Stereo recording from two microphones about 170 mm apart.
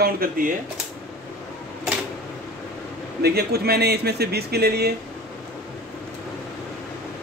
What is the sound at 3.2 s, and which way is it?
Speech, 70° right (ahead or behind).